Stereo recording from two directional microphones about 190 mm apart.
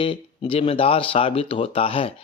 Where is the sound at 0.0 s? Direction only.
30° left (ahead or behind).